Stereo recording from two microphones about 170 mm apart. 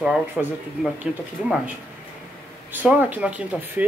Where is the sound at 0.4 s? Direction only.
5° right (ahead or behind).